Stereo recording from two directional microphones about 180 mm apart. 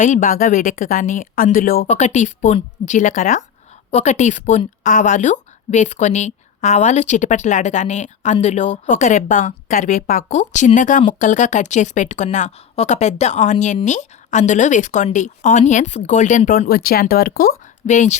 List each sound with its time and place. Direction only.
0.0 s speech: 45° left (ahead or behind)
1.9 s a woman's voice: 40° left (ahead or behind)